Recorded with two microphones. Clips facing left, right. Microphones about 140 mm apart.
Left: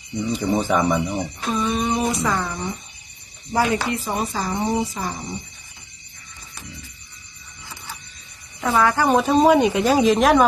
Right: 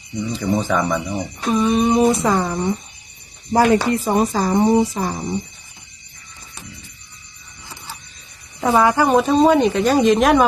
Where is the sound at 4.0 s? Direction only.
45° right (ahead or behind).